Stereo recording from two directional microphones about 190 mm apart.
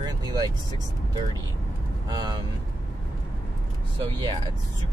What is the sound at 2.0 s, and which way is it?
Speech, 20° right (ahead or behind).